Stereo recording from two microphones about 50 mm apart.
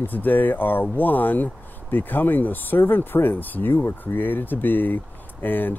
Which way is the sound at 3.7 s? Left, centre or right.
Left.